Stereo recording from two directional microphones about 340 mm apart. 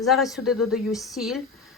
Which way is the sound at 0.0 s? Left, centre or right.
Centre.